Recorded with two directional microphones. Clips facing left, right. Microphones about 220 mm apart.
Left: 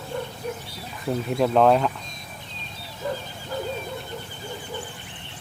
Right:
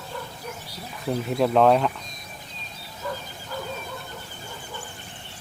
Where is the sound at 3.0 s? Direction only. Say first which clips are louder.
Left 3 dB; 25° left (ahead or behind).